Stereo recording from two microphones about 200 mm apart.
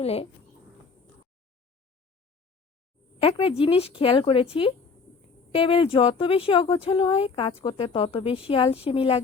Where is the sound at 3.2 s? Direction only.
30° left (ahead or behind).